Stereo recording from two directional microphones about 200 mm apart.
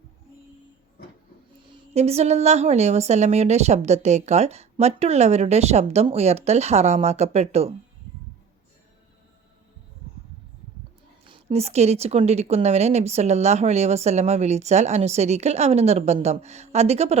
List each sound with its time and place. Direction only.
1.9 s speech: 30° right (ahead or behind)
11.3 s speech: 30° right (ahead or behind)